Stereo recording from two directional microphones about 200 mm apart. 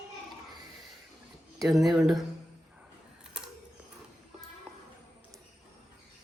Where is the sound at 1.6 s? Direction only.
Centre (ahead or behind).